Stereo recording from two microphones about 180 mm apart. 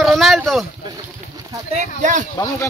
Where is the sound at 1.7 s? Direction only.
40° right (ahead or behind).